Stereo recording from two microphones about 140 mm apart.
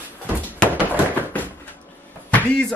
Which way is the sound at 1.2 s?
10° left (ahead or behind).